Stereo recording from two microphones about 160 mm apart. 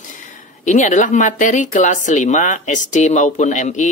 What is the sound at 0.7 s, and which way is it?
Speech, 50° left (ahead or behind).